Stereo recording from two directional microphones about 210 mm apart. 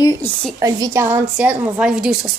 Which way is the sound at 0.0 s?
15° left (ahead or behind).